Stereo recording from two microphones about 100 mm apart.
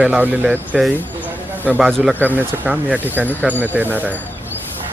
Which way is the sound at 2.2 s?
15° right (ahead or behind).